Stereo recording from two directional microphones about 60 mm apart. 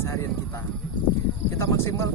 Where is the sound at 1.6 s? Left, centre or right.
Left.